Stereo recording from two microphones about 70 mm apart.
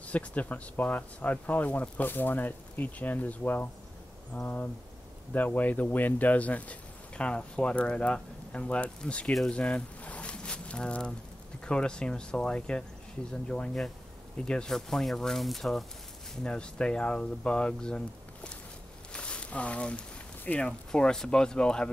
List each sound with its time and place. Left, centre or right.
0.0 s speech: left
9.5 s a sound: centre
11.6 s speech: centre
16.4 s speech: centre
19.1 s a sound: centre
20.6 s speech: centre